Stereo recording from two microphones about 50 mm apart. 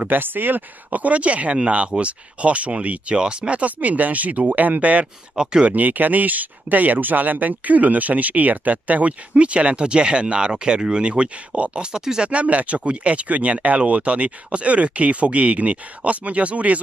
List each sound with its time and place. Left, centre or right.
0.1 s speech: right
5.3 s speech: centre
5.7 s speech: right; by 12.3 s centre
12.3 s speech: right